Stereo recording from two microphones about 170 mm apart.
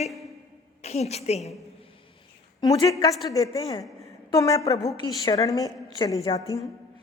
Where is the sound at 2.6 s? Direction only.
25° left (ahead or behind).